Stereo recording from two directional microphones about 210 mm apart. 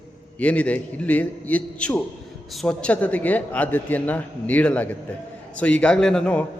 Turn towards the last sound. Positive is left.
turn(degrees=5)  # may be behind; listen again after turning